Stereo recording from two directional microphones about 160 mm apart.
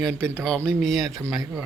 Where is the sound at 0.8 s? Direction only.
5° left (ahead or behind).